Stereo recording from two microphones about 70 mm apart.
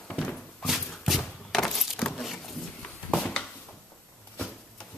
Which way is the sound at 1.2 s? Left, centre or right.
Centre.